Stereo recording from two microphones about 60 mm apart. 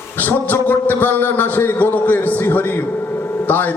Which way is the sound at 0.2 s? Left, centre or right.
Left.